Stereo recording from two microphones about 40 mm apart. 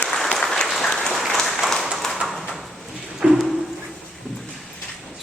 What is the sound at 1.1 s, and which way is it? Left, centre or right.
Applause, centre.